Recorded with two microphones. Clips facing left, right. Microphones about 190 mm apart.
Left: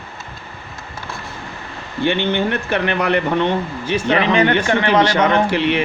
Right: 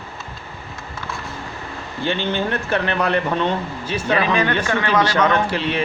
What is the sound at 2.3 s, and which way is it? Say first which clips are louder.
A man's voice: left 2 dB; 15° left (ahead or behind).